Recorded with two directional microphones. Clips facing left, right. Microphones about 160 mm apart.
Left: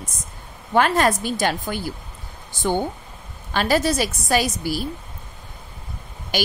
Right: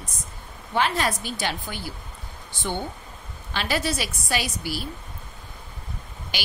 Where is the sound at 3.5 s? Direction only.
45° left (ahead or behind).